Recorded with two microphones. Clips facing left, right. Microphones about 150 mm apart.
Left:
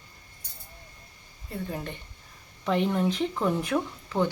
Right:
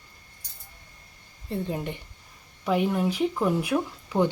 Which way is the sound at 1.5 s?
20° right (ahead or behind).